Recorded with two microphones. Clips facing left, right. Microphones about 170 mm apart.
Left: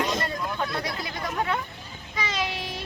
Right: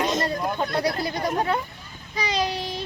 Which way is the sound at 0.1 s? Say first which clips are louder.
Right 4 dB; 30° right (ahead or behind).